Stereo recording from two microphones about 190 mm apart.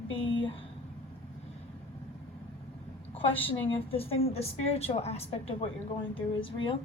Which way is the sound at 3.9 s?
30° left (ahead or behind).